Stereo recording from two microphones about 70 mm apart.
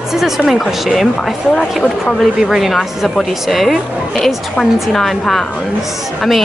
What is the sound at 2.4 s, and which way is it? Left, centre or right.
A woman's voice, centre.